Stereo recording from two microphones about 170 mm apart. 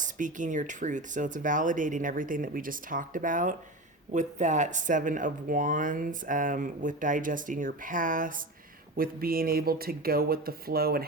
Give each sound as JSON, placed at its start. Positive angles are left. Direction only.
{"t": 0.0, "sound": "speech", "side_deg": -50}